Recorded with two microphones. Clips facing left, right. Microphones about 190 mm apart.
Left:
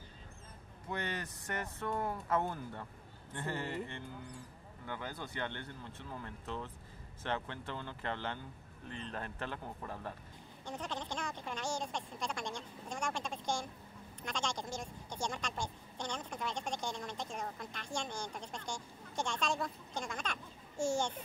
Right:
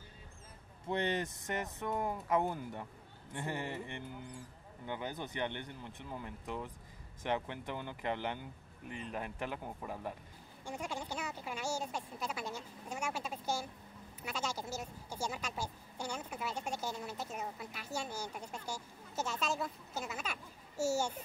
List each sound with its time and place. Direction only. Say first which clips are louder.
0.8 s speech: right 5 dB; 20° right (ahead or behind)